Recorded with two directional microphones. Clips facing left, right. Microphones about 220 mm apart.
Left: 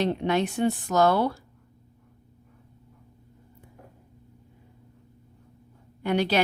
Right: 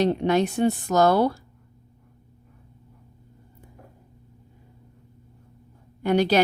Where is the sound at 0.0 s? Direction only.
40° right (ahead or behind).